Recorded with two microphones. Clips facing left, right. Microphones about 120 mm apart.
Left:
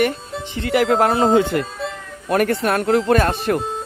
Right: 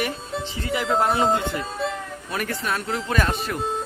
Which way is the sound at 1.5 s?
60° left (ahead or behind).